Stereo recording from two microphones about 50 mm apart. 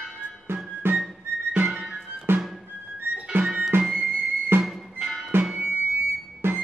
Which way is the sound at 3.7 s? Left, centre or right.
Right.